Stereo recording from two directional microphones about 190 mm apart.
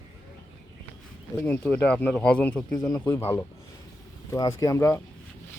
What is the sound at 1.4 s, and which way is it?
A man's voice, 10° left (ahead or behind).